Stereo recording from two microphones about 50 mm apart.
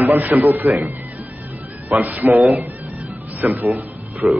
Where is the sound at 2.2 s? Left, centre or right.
Right.